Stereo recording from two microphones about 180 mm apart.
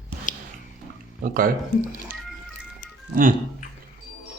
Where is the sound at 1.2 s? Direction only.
50° right (ahead or behind).